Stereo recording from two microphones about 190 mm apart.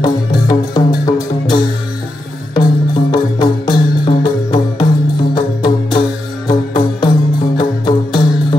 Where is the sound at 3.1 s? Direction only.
25° left (ahead or behind).